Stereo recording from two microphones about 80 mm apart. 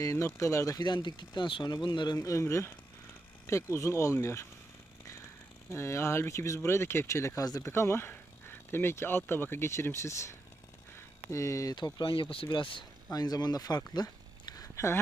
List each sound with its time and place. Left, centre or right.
0.0 s speech: left
0.8 s speech: left
1.7 s speech: left
2.1 s speech: left
5.6 s speech: left
7.7 s speech: left
11.9 s speech: left
13.1 s speech: left